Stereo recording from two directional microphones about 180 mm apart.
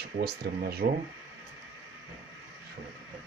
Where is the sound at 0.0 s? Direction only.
65° right (ahead or behind).